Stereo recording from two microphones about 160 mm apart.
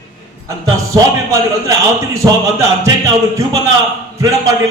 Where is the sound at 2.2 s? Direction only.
20° right (ahead or behind).